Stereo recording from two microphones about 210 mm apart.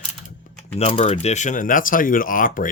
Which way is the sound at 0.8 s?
30° left (ahead or behind).